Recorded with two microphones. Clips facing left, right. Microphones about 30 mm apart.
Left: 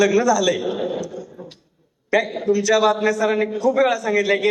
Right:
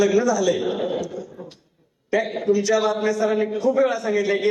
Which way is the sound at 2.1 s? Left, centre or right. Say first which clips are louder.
Left 3 dB; left.